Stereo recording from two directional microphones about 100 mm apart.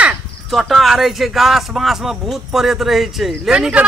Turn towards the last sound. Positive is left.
turn(degrees=-5)  # may be behind; listen again after turning